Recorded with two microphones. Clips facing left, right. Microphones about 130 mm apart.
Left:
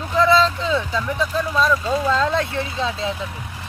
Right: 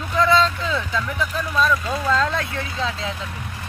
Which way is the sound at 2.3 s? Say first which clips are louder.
Left 4 dB; 25° left (ahead or behind).